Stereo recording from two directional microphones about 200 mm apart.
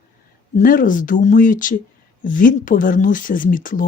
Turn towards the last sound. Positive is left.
turn(degrees=40)  # may be behind; listen again after turning